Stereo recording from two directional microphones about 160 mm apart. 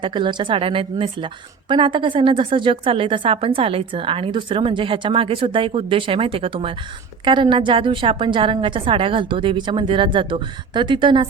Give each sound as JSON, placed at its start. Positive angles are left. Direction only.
{"t": 0.0, "sound": "a woman's voice", "side_deg": -30}